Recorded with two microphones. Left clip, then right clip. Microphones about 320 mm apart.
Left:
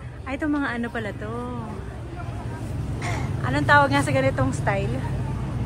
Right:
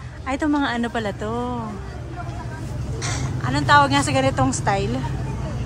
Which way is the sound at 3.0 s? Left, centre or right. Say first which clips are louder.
Right 2 dB; left.